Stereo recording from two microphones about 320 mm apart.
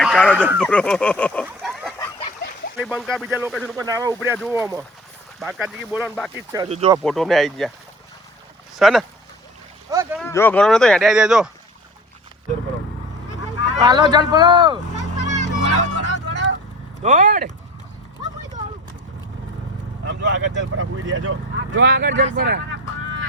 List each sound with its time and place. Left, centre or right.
0.0 s speech: centre
0.4 s chicken: centre
2.7 s speech: centre
6.5 s speech: centre
7.0 s speech: centre
8.8 s speech: centre
9.9 s a sound: centre
10.2 s speech: centre
13.8 s speech: centre
15.2 s music: left
17.0 s speech: right
18.2 s clip-clop: centre
20.1 s speech: right